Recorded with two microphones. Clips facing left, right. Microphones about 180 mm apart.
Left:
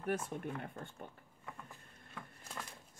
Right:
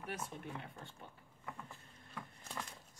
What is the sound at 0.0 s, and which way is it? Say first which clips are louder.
Speech: left 7 dB; 50° left (ahead or behind).